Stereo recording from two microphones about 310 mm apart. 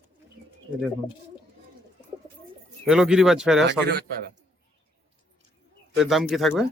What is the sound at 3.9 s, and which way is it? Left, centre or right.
Speech, right.